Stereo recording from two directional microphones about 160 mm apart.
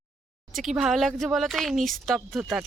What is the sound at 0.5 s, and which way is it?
Speech, centre (ahead or behind).